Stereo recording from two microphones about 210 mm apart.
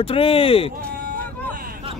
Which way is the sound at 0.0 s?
25° left (ahead or behind).